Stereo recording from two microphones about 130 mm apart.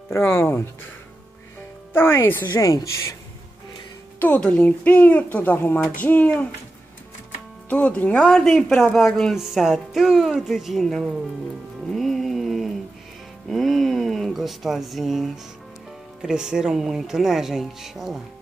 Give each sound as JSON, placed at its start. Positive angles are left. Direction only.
{"t": 0.1, "sound": "speech", "side_deg": 20}
{"t": 2.0, "sound": "speech", "side_deg": 15}
{"t": 2.4, "sound": "a woman's voice", "side_deg": 30}
{"t": 4.2, "sound": "speech", "side_deg": 10}
{"t": 7.7, "sound": "speech", "side_deg": 10}
{"t": 11.9, "sound": "music", "side_deg": 0}
{"t": 13.5, "sound": "speech", "side_deg": 0}